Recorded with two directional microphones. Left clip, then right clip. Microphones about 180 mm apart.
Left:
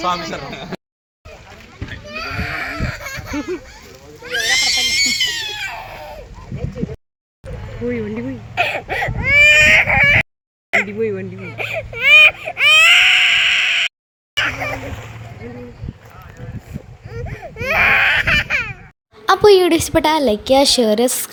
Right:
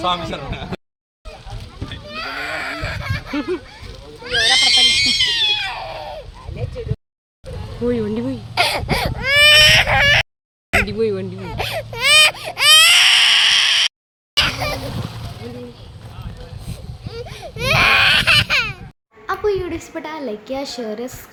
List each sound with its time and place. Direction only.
0.0 s speech: centre (ahead or behind)
2.1 s a sound: 40° left (ahead or behind)
4.5 s a sound: 70° left (ahead or behind)
7.9 s speech: 20° right (ahead or behind)
8.5 s a sound: 40° right (ahead or behind)
9.1 s baby cry: 30° right (ahead or behind)
10.7 s speech: 10° right (ahead or behind)
11.3 s speech: 35° right (ahead or behind)
11.9 s baby cry: 30° right (ahead or behind)
14.3 s a sound: centre (ahead or behind)
17.1 s baby cry: centre (ahead or behind)
19.2 s a woman's voice: 50° left (ahead or behind)